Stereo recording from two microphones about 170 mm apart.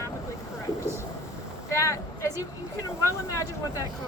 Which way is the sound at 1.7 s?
15° left (ahead or behind).